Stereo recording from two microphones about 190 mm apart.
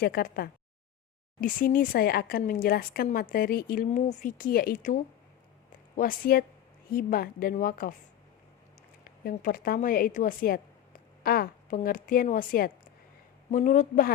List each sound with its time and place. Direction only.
0.0 s speech: 50° left (ahead or behind)
6.0 s speech: 50° left (ahead or behind)
9.0 s a woman's voice: 50° left (ahead or behind)